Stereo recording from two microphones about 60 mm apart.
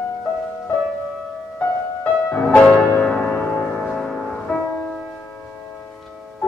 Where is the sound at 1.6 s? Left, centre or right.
Left.